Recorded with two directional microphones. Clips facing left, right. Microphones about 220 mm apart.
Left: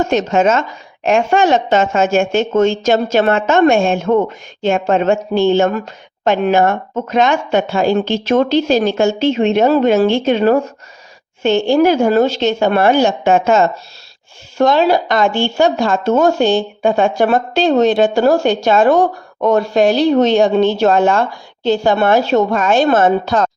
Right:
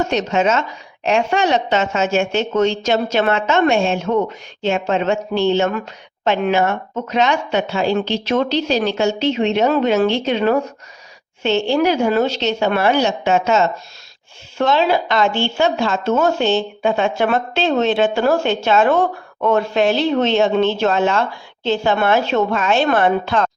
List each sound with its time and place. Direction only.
0.1 s a woman's voice: 50° left (ahead or behind)
9.6 s speech: 35° left (ahead or behind)
10.0 s a woman's voice: 50° left (ahead or behind)